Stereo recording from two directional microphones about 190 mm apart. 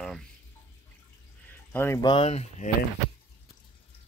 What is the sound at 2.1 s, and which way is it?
Speech, 30° left (ahead or behind).